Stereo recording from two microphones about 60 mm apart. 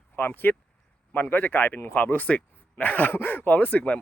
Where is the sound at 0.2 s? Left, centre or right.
Left.